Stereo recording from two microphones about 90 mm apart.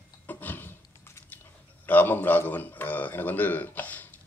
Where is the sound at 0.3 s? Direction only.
20° left (ahead or behind).